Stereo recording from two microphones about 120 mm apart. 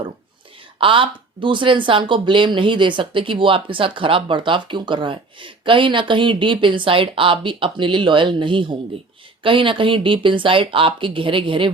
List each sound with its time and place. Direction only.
0.8 s speech: 45° right (ahead or behind)